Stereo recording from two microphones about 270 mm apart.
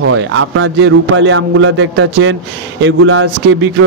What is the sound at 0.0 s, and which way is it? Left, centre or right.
Speech, right.